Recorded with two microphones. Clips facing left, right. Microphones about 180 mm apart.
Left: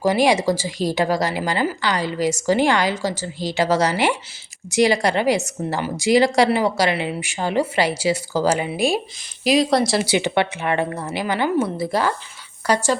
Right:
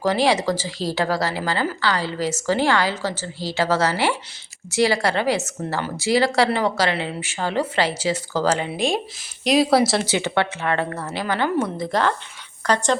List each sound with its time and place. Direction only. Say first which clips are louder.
0.0 s a woman's voice: left 2 dB; 15° left (ahead or behind)
10.1 s a woman's voice: left 2 dB; 15° left (ahead or behind)